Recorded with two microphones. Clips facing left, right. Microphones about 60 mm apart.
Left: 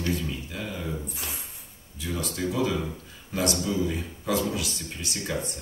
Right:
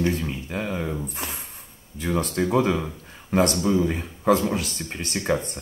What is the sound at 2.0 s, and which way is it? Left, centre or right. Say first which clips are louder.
A man's voice: right 6 dB; right.